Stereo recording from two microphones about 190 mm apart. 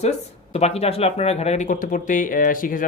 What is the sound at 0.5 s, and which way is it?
Speech, 35° left (ahead or behind).